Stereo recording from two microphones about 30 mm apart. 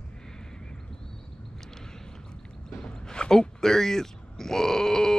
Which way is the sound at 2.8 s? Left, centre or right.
Left.